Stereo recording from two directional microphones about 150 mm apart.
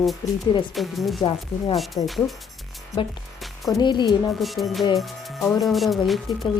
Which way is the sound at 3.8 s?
30° left (ahead or behind).